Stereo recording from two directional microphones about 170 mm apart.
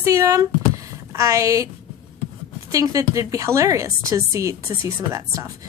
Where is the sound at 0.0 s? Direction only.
15° right (ahead or behind).